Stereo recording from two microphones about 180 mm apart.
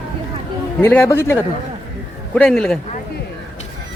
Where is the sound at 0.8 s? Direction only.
10° left (ahead or behind).